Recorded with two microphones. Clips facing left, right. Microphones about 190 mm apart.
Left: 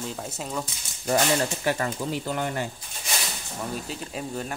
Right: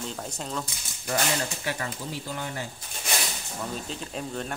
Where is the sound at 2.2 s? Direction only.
65° left (ahead or behind).